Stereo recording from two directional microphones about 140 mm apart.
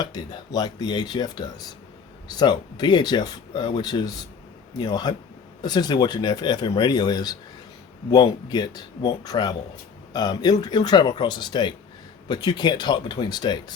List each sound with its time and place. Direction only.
0.0 s speech: 30° left (ahead or behind)